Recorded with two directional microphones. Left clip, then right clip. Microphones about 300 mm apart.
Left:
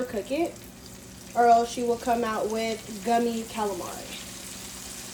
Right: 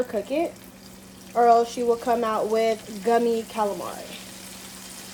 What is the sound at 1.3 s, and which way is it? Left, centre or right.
A woman's voice, right.